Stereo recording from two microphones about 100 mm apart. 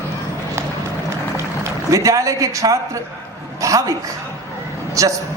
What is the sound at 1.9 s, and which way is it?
A man's voice, 35° right (ahead or behind).